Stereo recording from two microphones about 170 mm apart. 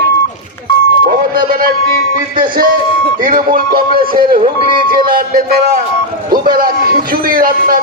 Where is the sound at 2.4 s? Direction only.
55° right (ahead or behind).